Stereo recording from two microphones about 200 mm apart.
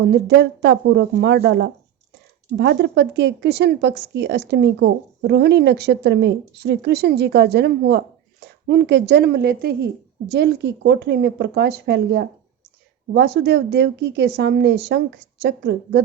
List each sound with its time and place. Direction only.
0.1 s a woman's voice: 55° right (ahead or behind)